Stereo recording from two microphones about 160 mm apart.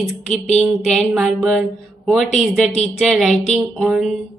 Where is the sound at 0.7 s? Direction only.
Centre (ahead or behind).